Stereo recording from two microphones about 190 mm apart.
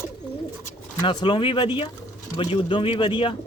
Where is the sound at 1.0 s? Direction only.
25° left (ahead or behind).